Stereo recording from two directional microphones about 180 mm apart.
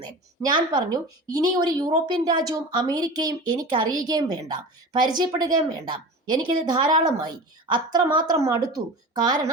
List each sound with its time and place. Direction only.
0.0 s speech: 25° right (ahead or behind)